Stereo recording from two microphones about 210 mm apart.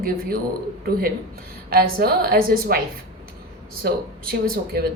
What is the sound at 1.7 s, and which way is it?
Speech, 45° right (ahead or behind).